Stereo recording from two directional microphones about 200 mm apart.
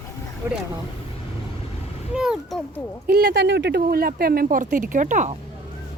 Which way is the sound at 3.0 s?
50° right (ahead or behind).